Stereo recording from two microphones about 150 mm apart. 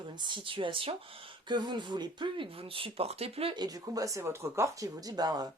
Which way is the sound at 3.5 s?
25° right (ahead or behind).